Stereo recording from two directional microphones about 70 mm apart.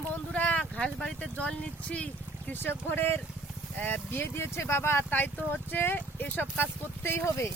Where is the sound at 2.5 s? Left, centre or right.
Left.